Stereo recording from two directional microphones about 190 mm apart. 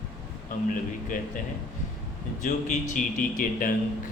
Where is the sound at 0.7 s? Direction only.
45° left (ahead or behind).